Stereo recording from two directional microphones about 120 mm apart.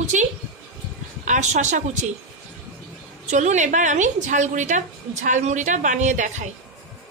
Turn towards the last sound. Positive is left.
turn(degrees=-90)